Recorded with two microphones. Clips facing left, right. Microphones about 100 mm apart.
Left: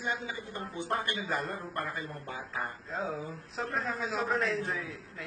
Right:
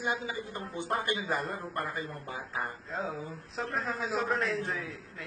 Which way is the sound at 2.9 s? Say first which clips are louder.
Left 1 dB; centre (ahead or behind).